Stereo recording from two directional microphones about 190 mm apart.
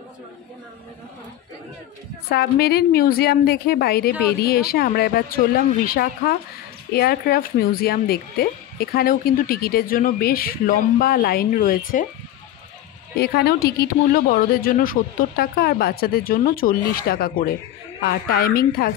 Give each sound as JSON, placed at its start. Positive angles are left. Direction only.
{"t": 2.2, "sound": "a woman's voice", "side_deg": 55}
{"t": 13.1, "sound": "speech", "side_deg": 60}